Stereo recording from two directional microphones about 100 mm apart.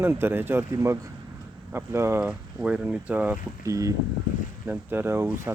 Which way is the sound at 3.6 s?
35° right (ahead or behind).